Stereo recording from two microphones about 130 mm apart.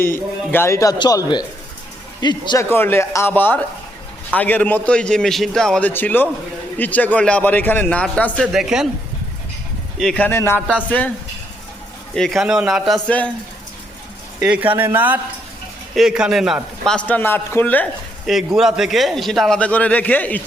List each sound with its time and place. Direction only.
0.5 s a man's voice: 20° left (ahead or behind)
0.9 s a man's voice: 35° left (ahead or behind)
2.6 s a man's voice: 15° left (ahead or behind)
8.5 s a man's voice: 5° right (ahead or behind)
10.0 s a man's voice: 5° left (ahead or behind)
10.2 s a man's voice: 20° left (ahead or behind)
12.1 s a man's voice: centre (ahead or behind)
13.1 s a man's voice: 10° left (ahead or behind)
14.3 s a man's voice: 10° right (ahead or behind)
16.9 s a man's voice: 10° left (ahead or behind)
18.3 s a man's voice: centre (ahead or behind)